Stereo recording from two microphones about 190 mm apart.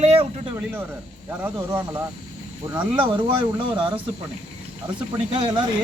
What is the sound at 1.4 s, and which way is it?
Speech, 10° right (ahead or behind).